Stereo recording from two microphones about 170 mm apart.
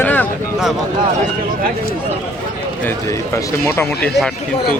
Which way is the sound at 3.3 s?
15° left (ahead or behind).